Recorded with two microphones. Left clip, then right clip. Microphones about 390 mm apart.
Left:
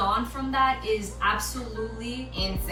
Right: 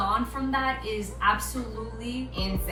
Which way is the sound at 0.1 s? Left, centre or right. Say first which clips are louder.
Even; centre.